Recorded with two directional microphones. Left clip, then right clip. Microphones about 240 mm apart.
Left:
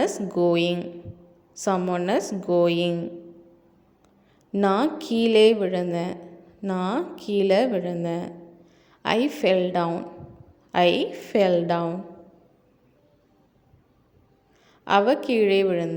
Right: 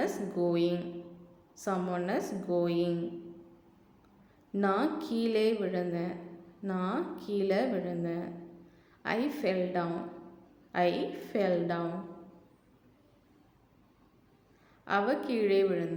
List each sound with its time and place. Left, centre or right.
0.0 s a woman's voice: left
4.5 s a woman's voice: left
14.8 s a woman's voice: left